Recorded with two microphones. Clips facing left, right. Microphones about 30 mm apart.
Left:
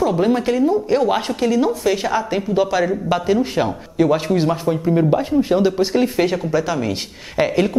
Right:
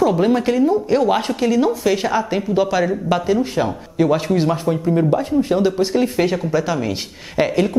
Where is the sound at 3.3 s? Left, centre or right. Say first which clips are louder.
Left 2 dB; centre.